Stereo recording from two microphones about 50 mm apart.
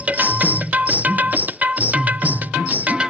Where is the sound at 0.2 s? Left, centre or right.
Right.